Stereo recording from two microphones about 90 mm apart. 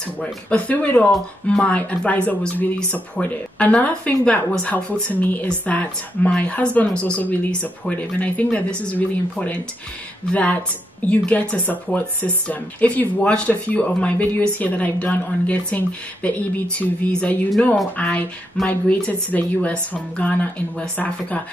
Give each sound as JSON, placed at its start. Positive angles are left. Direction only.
{"t": 0.2, "sound": "speech", "side_deg": 15}